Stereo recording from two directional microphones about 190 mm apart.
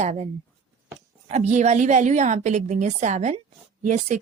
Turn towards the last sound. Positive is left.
turn(degrees=-40)  # may be behind; listen again after turning